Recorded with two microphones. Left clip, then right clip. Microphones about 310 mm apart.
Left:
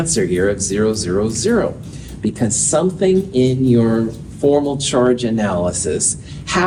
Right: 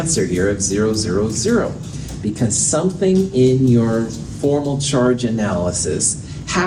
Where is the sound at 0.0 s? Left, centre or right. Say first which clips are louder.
Left 2 dB; left.